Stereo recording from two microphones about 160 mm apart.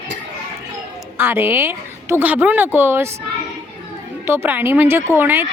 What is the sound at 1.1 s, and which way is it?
A woman's voice, 15° right (ahead or behind).